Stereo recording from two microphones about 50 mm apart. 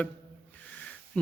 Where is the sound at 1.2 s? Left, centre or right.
Left.